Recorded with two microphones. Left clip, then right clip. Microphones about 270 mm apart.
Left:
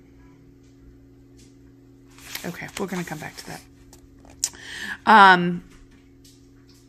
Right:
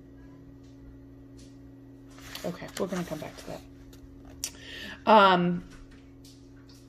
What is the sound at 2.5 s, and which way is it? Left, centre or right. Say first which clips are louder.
Speech: left 3 dB; left.